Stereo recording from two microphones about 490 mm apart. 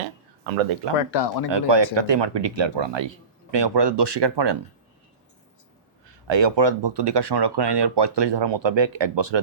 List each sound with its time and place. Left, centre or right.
0.9 s speech: left
1.5 s speech: right
6.1 s speech: right